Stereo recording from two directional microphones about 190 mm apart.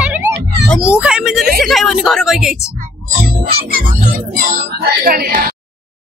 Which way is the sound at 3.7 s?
50° right (ahead or behind).